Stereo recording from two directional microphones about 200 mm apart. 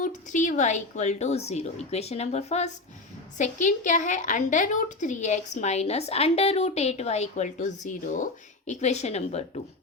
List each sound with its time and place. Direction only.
0.0 s a woman's voice: 40° left (ahead or behind)